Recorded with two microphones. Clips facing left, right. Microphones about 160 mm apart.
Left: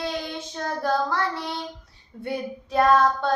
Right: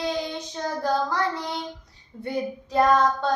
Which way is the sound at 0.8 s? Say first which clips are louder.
Even; 20° right (ahead or behind).